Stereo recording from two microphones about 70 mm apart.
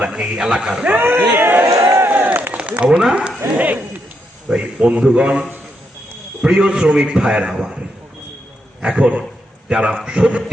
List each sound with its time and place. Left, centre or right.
0.0 s a man's voice: centre
0.9 s speech: right
1.3 s a sound: right; by 3.3 s centre
3.5 s a man's voice: right
8.8 s a man's voice: centre